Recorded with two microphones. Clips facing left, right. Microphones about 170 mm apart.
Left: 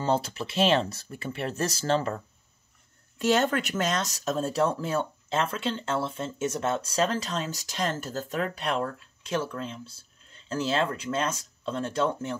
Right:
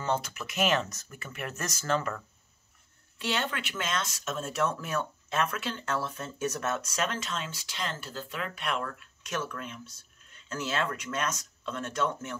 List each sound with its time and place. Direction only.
0.0 s speech: 30° left (ahead or behind)
3.2 s speech: 45° left (ahead or behind)